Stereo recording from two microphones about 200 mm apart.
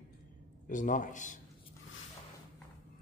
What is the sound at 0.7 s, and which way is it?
Speech, 40° left (ahead or behind).